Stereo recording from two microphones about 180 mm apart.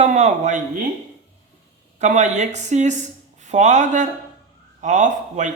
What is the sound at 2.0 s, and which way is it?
Speech, 40° right (ahead or behind).